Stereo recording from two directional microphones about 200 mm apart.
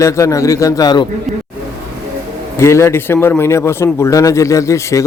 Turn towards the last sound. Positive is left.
turn(degrees=15)  # may be behind; listen again after turning